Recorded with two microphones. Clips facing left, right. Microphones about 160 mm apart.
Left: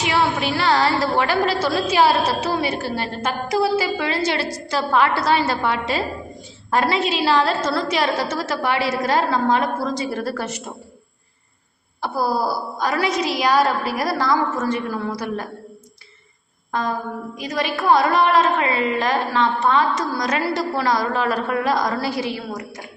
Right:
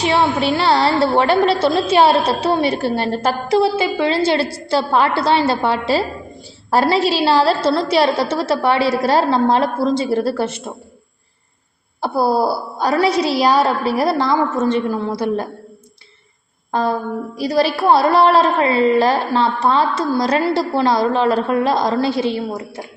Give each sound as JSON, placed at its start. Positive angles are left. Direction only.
{"t": 0.0, "sound": "a woman's voice", "side_deg": -30}
{"t": 11.9, "sound": "a woman's voice", "side_deg": -30}
{"t": 16.7, "sound": "a woman's voice", "side_deg": -35}